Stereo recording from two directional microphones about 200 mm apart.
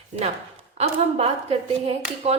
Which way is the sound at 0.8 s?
30° right (ahead or behind).